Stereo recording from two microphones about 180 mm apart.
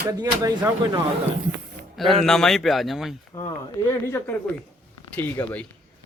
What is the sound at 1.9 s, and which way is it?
A man's voice, centre (ahead or behind).